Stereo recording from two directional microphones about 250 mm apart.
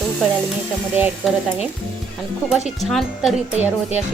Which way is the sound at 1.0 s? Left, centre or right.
Centre.